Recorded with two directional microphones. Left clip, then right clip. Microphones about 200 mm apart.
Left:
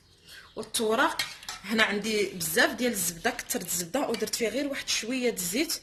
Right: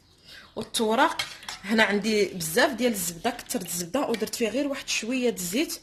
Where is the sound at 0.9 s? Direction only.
40° right (ahead or behind).